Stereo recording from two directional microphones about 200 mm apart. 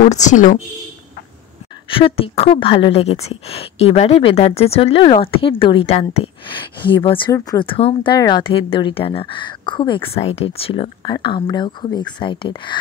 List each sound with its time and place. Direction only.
0.1 s a woman's voice: 35° left (ahead or behind)
1.9 s a woman's voice: 25° left (ahead or behind)